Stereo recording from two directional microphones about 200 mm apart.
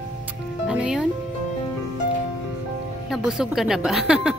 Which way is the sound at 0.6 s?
5° right (ahead or behind).